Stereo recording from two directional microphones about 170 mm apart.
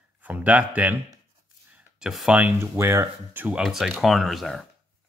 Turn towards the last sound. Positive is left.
turn(degrees=0)  # may be behind; listen again after turning